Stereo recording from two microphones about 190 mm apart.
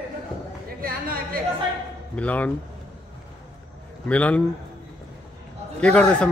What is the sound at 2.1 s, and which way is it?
Speech, 5° left (ahead or behind).